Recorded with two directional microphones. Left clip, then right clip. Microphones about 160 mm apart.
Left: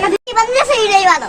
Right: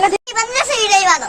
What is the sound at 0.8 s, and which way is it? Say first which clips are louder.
Speech: even; 25° right (ahead or behind).